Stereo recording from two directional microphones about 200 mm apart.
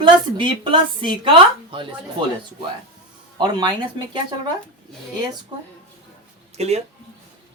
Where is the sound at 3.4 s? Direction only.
20° right (ahead or behind).